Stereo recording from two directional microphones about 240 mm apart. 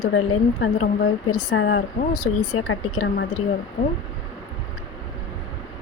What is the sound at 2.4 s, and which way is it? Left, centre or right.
Speech, left.